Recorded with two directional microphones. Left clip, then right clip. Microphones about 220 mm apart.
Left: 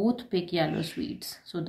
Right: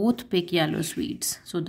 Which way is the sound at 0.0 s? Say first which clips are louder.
Right 3 dB; 40° right (ahead or behind).